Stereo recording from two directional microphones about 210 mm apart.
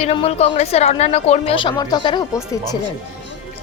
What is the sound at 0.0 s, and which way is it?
A woman's voice, 25° left (ahead or behind).